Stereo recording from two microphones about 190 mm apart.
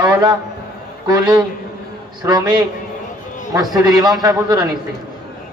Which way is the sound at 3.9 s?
20° right (ahead or behind).